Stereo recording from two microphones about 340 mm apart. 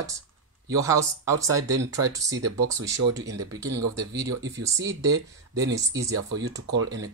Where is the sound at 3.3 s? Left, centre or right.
Centre.